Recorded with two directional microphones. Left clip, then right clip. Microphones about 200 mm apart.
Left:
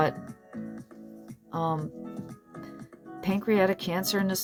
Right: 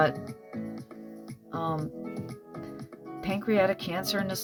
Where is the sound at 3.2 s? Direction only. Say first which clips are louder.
Left 1 dB; 40° left (ahead or behind).